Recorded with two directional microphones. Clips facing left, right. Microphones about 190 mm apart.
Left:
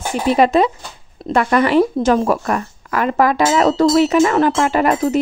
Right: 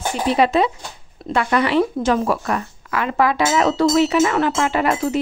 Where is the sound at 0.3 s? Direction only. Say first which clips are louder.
Left 3 dB; 45° left (ahead or behind).